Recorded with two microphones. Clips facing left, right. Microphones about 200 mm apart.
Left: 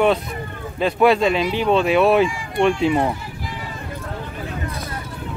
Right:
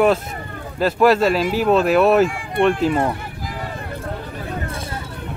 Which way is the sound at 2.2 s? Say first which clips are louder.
Right 1 dB; 55° right (ahead or behind).